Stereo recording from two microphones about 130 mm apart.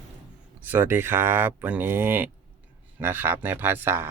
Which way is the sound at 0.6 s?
15° right (ahead or behind).